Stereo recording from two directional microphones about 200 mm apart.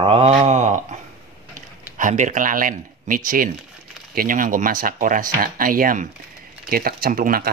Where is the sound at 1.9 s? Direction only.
40° right (ahead or behind).